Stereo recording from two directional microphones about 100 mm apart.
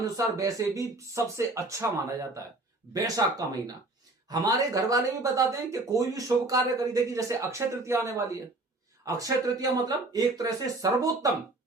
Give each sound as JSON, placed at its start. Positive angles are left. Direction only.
{"t": 0.0, "sound": "speech", "side_deg": -35}